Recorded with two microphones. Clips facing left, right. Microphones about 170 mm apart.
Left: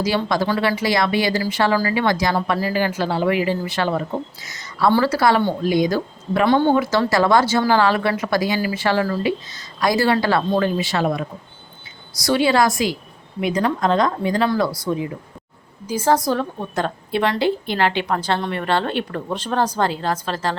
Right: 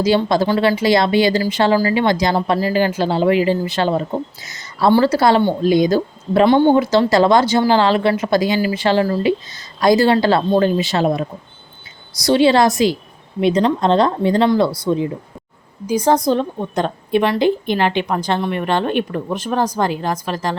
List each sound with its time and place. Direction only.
0.0 s speech: 25° right (ahead or behind)
15.9 s a woman's voice: 20° right (ahead or behind)